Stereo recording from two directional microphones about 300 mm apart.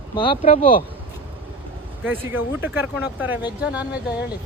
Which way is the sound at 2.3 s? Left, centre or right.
Centre.